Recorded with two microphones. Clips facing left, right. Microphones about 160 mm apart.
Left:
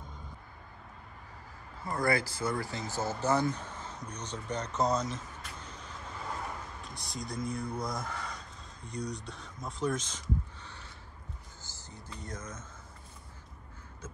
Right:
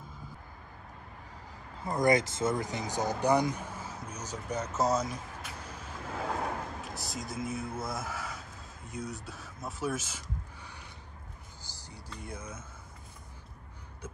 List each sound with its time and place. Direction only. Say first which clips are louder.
1.8 s speech: right 4 dB; 20° right (ahead or behind)
6.1 s vehicle: right 6 dB; 75° right (ahead or behind)
6.8 s speech: right 2 dB; centre (ahead or behind)
11.9 s speech: even; 10° right (ahead or behind)